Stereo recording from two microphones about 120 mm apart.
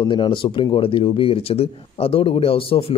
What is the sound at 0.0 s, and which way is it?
Speech, 45° left (ahead or behind).